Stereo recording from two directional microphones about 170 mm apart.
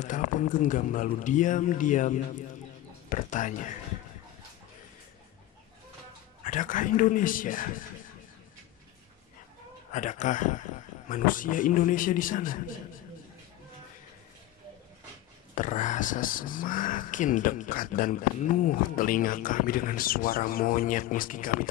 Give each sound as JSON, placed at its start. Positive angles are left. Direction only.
{"t": 0.0, "sound": "speech", "side_deg": 50}
{"t": 6.4, "sound": "speech", "side_deg": 50}
{"t": 9.9, "sound": "speech", "side_deg": 45}
{"t": 15.5, "sound": "speech", "side_deg": 50}